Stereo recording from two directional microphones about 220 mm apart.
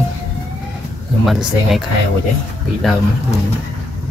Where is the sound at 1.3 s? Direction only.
Centre (ahead or behind).